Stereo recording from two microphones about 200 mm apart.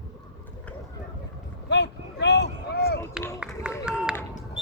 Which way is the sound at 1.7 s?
60° left (ahead or behind).